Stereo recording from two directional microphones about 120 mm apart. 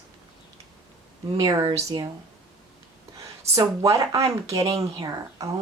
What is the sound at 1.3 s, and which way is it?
Speech, 30° right (ahead or behind).